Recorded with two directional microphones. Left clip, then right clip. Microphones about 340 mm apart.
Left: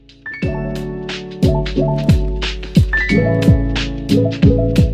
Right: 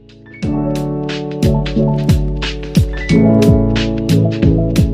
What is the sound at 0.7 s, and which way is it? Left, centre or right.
Music, centre.